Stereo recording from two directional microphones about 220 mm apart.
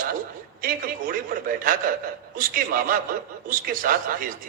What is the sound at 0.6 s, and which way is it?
A man's voice, 40° right (ahead or behind).